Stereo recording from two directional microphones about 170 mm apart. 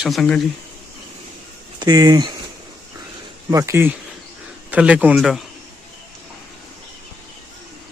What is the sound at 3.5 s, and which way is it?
A man's voice, 15° right (ahead or behind).